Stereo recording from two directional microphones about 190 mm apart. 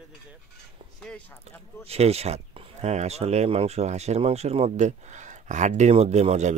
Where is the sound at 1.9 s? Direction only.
35° right (ahead or behind).